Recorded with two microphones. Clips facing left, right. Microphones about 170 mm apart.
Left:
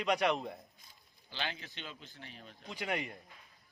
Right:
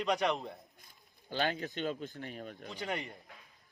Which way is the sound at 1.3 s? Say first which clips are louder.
Right 8 dB; 45° right (ahead or behind).